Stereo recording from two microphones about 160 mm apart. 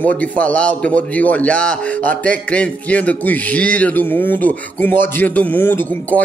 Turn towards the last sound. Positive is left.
turn(degrees=10)  # may be behind; listen again after turning